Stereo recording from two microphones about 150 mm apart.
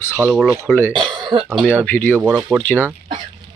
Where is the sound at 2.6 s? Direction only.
10° left (ahead or behind).